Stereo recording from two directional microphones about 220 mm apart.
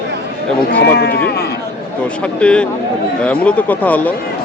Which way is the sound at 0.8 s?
45° left (ahead or behind).